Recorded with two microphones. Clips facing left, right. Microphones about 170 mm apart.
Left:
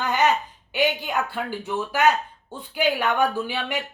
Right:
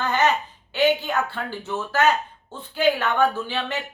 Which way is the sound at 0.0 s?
15° left (ahead or behind).